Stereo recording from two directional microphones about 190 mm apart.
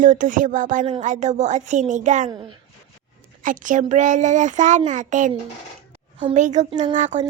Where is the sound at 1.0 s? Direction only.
40° right (ahead or behind).